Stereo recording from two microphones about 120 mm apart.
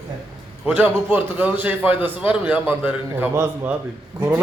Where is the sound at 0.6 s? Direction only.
15° right (ahead or behind).